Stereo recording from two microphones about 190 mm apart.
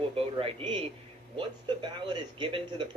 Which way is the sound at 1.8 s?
25° right (ahead or behind).